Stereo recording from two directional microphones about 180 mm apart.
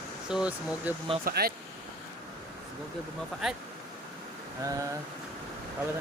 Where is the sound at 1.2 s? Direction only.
60° right (ahead or behind).